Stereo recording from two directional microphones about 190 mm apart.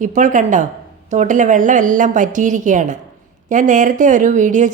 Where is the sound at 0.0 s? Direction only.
40° right (ahead or behind).